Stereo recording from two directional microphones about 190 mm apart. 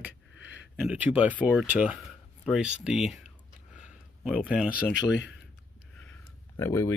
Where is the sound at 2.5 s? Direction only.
5° right (ahead or behind).